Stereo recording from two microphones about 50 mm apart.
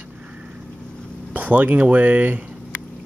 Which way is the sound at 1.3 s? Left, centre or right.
Right.